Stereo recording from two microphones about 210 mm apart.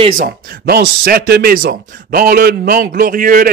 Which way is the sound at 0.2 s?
45° right (ahead or behind).